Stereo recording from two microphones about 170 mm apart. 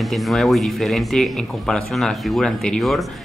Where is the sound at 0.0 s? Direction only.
Centre (ahead or behind).